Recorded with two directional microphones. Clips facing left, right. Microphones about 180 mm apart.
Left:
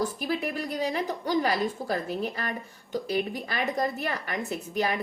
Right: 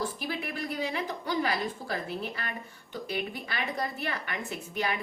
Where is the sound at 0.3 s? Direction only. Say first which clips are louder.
Left 5 dB; 40° left (ahead or behind).